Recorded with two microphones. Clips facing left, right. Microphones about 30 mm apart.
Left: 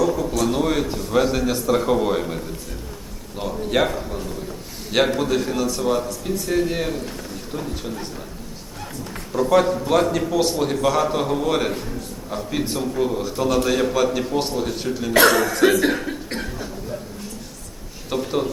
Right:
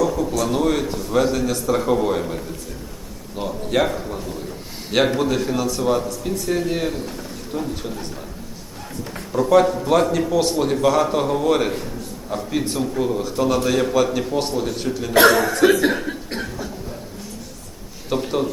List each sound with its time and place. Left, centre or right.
0.0 s a man's voice: centre
9.3 s a man's voice: centre
15.3 s speech: centre
15.8 s chuckle: centre
18.1 s speech: centre